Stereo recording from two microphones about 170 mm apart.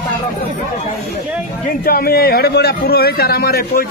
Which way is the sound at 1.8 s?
65° left (ahead or behind).